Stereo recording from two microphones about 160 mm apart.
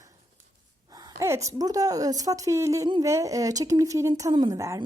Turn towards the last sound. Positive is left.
turn(degrees=-20)  # may be behind; listen again after turning